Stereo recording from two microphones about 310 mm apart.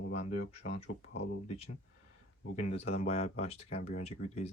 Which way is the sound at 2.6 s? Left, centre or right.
Left.